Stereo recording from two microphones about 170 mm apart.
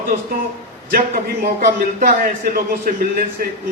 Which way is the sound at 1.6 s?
55° right (ahead or behind).